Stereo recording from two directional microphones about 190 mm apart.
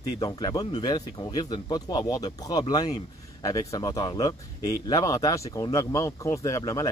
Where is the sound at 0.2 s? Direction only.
20° left (ahead or behind).